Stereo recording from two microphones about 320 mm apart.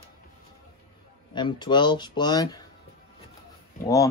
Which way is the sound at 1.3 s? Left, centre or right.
Centre.